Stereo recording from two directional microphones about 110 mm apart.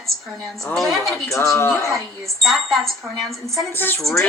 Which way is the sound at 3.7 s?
20° left (ahead or behind).